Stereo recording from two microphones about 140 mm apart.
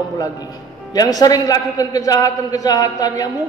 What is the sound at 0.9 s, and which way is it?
A man's voice, 25° left (ahead or behind).